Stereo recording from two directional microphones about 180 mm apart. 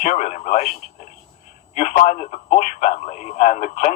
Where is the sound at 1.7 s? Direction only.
45° left (ahead or behind).